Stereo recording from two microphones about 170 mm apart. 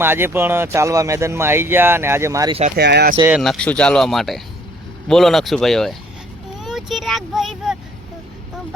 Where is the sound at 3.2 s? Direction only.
10° right (ahead or behind).